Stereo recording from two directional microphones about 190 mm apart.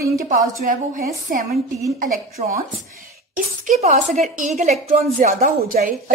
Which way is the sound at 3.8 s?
35° right (ahead or behind).